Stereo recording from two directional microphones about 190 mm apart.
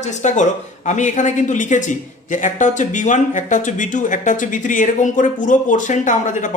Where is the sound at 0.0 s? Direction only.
40° left (ahead or behind).